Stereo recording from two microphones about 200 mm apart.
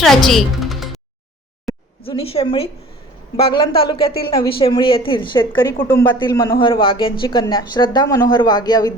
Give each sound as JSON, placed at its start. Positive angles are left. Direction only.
{"t": 0.0, "sound": "speech", "side_deg": 0}
{"t": 2.0, "sound": "a woman's voice", "side_deg": 30}